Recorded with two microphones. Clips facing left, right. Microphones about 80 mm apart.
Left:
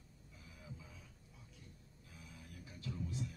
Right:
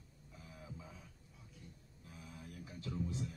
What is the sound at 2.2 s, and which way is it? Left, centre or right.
Music, right.